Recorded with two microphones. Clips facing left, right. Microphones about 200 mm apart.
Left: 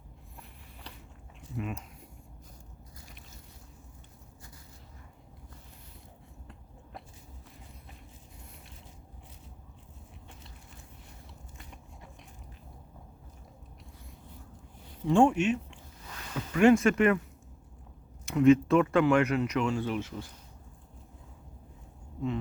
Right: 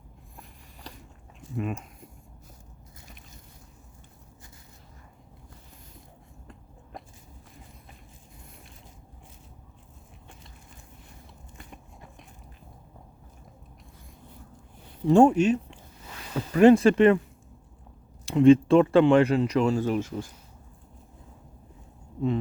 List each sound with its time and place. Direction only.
0.3 s a sound: 40° right (ahead or behind)
6.9 s biting: 45° right (ahead or behind)
15.0 s speech: 40° right (ahead or behind)
18.3 s speech: 30° right (ahead or behind); by 20.3 s 45° right (ahead or behind)